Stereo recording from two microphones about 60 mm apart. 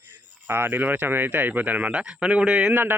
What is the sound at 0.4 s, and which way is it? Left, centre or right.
Speech, right.